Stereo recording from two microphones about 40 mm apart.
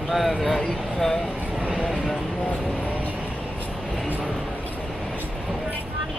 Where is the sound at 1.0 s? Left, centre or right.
Centre.